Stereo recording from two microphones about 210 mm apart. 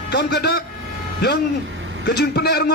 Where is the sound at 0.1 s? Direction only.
50° left (ahead or behind).